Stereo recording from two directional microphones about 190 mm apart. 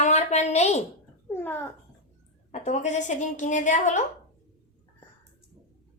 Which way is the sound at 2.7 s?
40° left (ahead or behind).